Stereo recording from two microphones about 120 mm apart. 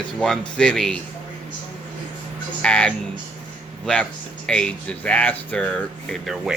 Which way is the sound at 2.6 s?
10° left (ahead or behind).